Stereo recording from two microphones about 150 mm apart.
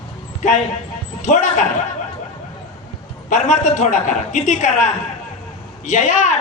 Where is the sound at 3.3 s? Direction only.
55° left (ahead or behind).